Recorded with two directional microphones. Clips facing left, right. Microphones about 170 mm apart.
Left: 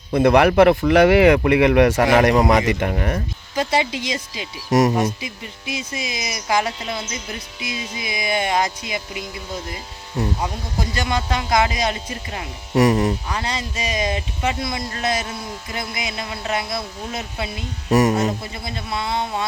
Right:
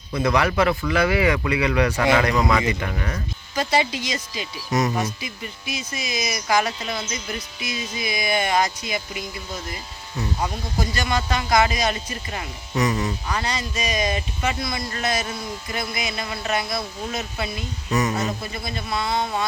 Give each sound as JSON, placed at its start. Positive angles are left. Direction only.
{"t": 0.1, "sound": "a man's voice", "side_deg": 55}
{"t": 3.5, "sound": "speech", "side_deg": 20}
{"t": 10.8, "sound": "speech", "side_deg": 20}
{"t": 12.7, "sound": "a man's voice", "side_deg": 50}
{"t": 13.3, "sound": "speech", "side_deg": 25}
{"t": 17.8, "sound": "a man's voice", "side_deg": 45}
{"t": 18.3, "sound": "speech", "side_deg": 20}